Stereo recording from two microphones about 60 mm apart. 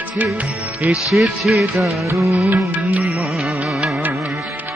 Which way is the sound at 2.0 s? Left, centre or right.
Right.